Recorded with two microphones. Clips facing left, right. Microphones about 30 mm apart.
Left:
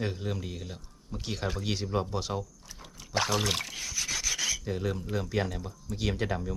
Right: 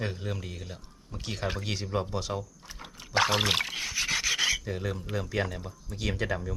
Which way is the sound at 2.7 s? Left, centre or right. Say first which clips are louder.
Right 4 dB; right.